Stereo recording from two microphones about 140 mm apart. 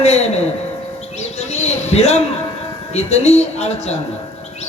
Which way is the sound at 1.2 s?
50° left (ahead or behind).